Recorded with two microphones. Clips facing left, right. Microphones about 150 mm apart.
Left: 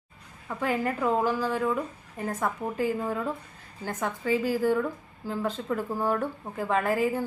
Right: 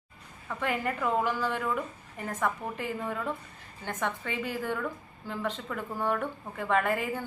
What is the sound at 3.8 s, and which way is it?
A woman's voice, 35° left (ahead or behind).